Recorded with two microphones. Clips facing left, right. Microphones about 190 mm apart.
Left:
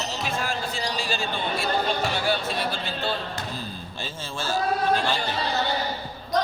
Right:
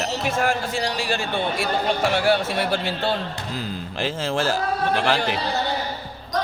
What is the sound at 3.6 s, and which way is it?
Speech, 90° right.